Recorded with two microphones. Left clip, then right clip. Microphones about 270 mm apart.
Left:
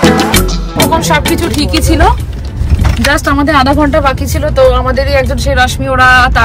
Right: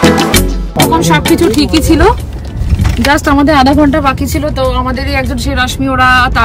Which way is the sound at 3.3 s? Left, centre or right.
Centre.